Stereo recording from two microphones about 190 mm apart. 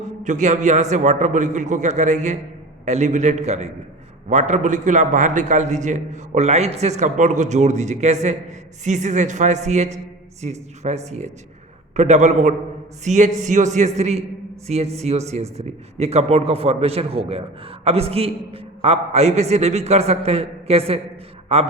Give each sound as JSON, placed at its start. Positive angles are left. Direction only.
{"t": 0.0, "sound": "a man's voice", "side_deg": -40}